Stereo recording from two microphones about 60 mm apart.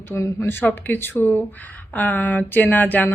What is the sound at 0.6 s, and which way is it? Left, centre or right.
Speech, left.